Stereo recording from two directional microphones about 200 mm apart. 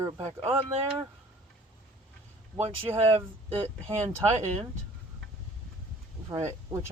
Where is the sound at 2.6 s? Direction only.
30° right (ahead or behind).